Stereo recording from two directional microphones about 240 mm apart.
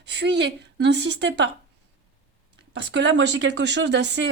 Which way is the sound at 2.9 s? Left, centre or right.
Right.